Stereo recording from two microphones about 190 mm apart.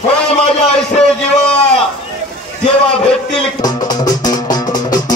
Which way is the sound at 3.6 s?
20° left (ahead or behind).